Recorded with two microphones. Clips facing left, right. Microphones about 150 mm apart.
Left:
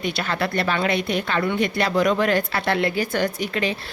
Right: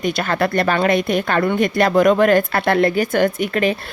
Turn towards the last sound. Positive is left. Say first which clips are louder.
# right 6 dB
turn(degrees=-50)  # may be behind; listen again after turning